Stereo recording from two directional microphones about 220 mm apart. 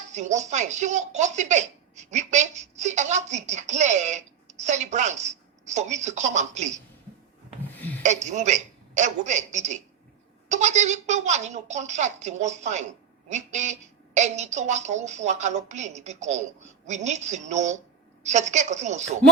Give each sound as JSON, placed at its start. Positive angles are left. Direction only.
{"t": 0.1, "sound": "speech", "side_deg": -30}
{"t": 7.8, "sound": "a sound", "side_deg": 5}
{"t": 8.0, "sound": "speech", "side_deg": -35}